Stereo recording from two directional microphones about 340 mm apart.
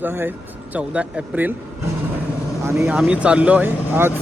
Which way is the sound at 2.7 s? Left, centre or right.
Centre.